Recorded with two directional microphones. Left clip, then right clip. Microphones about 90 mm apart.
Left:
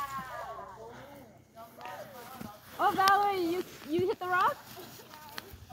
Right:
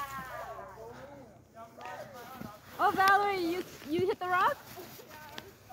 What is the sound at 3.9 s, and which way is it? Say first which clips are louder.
Speech: even; 10° right (ahead or behind).